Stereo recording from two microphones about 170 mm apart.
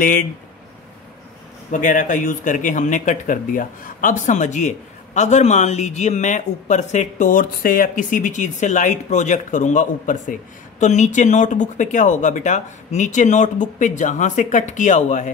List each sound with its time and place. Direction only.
0.0 s speech: 50° left (ahead or behind)
1.7 s speech: 50° left (ahead or behind)